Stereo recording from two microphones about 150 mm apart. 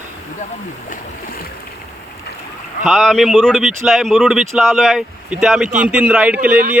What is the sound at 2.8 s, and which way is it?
A man's voice, centre (ahead or behind).